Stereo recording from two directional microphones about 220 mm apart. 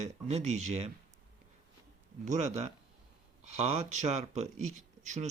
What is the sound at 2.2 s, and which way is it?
Speech, 30° right (ahead or behind).